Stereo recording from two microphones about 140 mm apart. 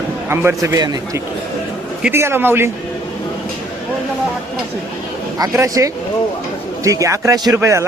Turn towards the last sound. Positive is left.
turn(degrees=-20)  # may be behind; listen again after turning